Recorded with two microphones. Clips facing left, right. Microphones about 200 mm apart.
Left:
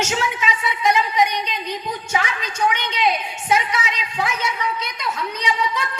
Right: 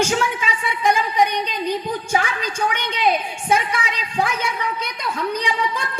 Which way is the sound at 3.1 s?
30° right (ahead or behind).